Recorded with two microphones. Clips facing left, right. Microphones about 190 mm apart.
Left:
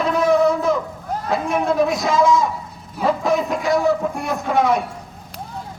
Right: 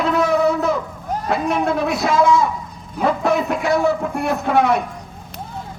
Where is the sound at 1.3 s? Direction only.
60° right (ahead or behind).